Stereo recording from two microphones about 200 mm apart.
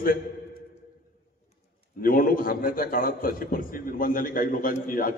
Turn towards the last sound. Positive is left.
turn(degrees=45)  # may be behind; listen again after turning